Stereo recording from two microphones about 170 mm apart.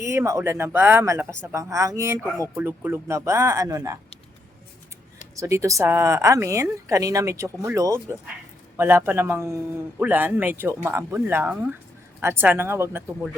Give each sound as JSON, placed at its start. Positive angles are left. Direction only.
{"t": 0.0, "sound": "speech", "side_deg": -15}
{"t": 5.4, "sound": "speech", "side_deg": -15}